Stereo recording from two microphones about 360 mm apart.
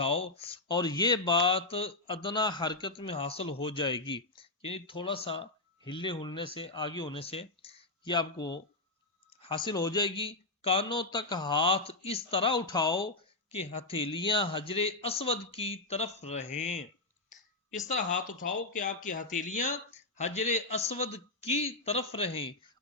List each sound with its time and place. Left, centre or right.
0.0 s speech: centre
17.8 s speech: left